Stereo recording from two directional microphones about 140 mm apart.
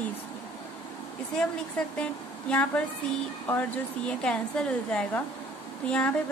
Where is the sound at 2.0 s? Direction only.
10° left (ahead or behind).